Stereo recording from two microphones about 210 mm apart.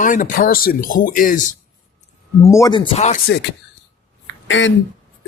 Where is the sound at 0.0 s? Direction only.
40° left (ahead or behind).